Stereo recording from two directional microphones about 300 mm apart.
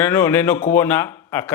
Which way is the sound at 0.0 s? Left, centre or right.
Centre.